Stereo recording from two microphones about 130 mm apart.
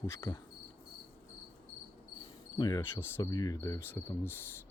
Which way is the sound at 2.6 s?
30° left (ahead or behind).